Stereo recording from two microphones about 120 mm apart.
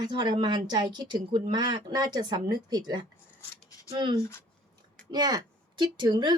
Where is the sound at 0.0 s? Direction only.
35° right (ahead or behind).